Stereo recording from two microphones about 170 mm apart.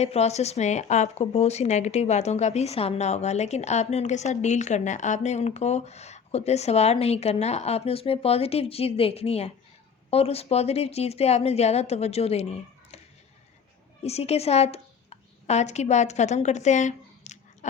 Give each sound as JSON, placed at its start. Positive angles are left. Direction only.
{"t": 0.0, "sound": "speech", "side_deg": 40}
{"t": 14.0, "sound": "a woman's voice", "side_deg": 40}